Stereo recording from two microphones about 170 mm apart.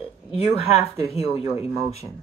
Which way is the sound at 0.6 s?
35° left (ahead or behind).